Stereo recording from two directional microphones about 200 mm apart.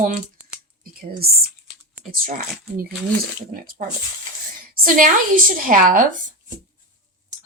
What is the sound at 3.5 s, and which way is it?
A woman's voice, 45° right (ahead or behind).